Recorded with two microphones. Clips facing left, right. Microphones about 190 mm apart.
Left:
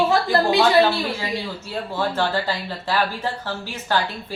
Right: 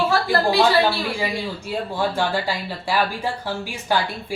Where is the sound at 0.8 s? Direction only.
10° right (ahead or behind).